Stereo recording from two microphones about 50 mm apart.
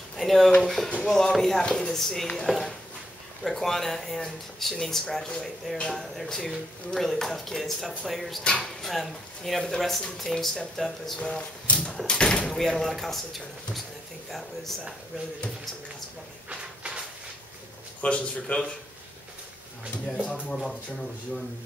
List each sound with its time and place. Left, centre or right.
0.2 s a sound: centre
0.6 s speech: centre
1.6 s speech: centre
1.9 s speech: centre
11.1 s speech: left
12.4 s speech: centre
16.4 s a sound: right
18.0 s speech: left
20.4 s speech: centre